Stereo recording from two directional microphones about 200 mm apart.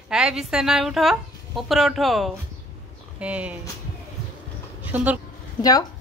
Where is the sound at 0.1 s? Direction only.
5° right (ahead or behind).